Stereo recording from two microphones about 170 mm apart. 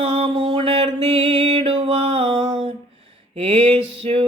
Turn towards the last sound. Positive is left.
turn(degrees=-35)  # may be behind; listen again after turning